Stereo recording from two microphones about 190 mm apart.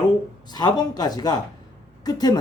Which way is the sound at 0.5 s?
20° left (ahead or behind).